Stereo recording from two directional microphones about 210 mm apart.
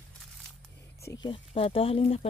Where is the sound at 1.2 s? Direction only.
25° left (ahead or behind).